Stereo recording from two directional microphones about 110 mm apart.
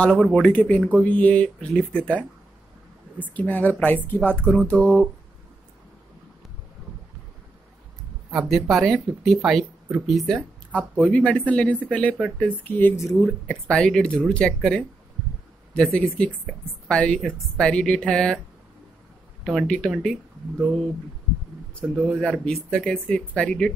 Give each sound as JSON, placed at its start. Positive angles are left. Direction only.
{"t": 0.0, "sound": "speech", "side_deg": 10}
{"t": 3.3, "sound": "speech", "side_deg": 15}
{"t": 8.3, "sound": "speech", "side_deg": 0}
{"t": 11.1, "sound": "speech", "side_deg": 10}
{"t": 13.5, "sound": "speech", "side_deg": 5}
{"t": 19.4, "sound": "speech", "side_deg": 5}
{"t": 21.9, "sound": "speech", "side_deg": 10}